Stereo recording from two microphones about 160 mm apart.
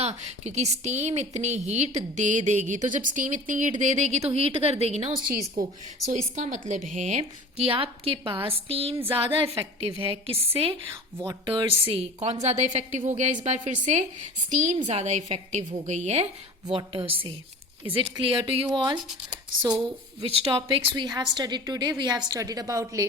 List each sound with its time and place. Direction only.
0.0 s a woman's voice: 45° right (ahead or behind)
6.3 s a woman's voice: 50° right (ahead or behind)
16.7 s a woman's voice: 35° right (ahead or behind)